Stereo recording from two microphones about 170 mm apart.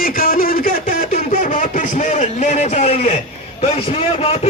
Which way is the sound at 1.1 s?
45° left (ahead or behind).